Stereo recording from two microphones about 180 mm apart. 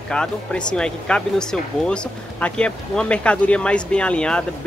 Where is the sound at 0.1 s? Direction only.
5° left (ahead or behind).